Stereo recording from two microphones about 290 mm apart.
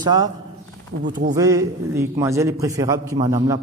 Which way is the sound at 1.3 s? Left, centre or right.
Centre.